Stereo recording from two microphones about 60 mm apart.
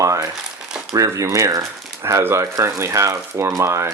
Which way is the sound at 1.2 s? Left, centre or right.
Right.